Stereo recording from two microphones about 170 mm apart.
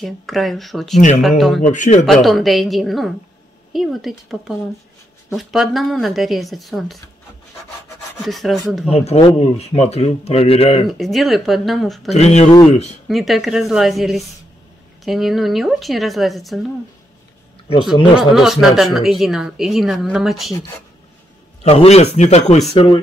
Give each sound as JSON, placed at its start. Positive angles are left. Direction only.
{"t": 0.0, "sound": "a woman's voice", "side_deg": 0}
{"t": 1.6, "sound": "a man's voice", "side_deg": 45}
{"t": 2.2, "sound": "a woman's voice", "side_deg": 0}
{"t": 8.2, "sound": "a woman's voice", "side_deg": 0}
{"t": 8.9, "sound": "speech", "side_deg": 35}
{"t": 10.9, "sound": "a woman's voice", "side_deg": 0}
{"t": 12.1, "sound": "speech", "side_deg": 40}
{"t": 13.1, "sound": "a woman's voice", "side_deg": 0}
{"t": 18.1, "sound": "a woman's voice", "side_deg": 0}
{"t": 21.6, "sound": "speech", "side_deg": 40}